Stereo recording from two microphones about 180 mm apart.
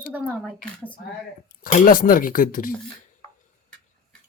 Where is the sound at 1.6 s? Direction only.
50° left (ahead or behind).